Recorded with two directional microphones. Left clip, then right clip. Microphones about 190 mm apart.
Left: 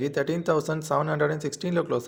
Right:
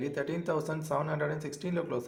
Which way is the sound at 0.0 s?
35° left (ahead or behind).